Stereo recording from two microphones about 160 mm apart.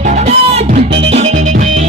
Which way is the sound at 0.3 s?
45° right (ahead or behind).